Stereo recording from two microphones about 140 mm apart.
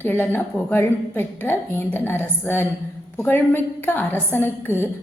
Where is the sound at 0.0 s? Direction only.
15° left (ahead or behind).